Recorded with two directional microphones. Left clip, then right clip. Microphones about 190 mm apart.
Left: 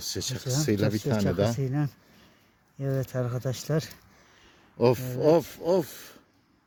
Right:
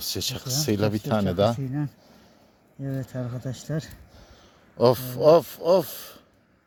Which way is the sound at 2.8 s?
50° left (ahead or behind).